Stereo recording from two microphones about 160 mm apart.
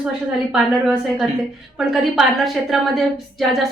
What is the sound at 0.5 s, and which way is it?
Speech, 5° right (ahead or behind).